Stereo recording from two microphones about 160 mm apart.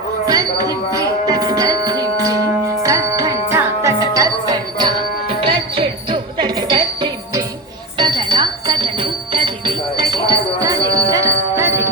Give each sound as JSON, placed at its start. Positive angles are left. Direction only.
{"t": 0.3, "sound": "music", "side_deg": -25}